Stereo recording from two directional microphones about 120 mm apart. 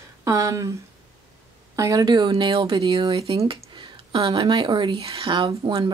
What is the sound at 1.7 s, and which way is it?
Speech, 30° right (ahead or behind).